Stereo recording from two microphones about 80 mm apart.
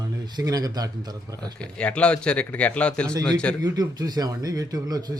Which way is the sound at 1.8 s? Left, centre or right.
Centre.